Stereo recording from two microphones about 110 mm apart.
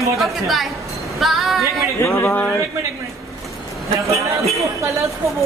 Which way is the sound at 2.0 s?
20° left (ahead or behind).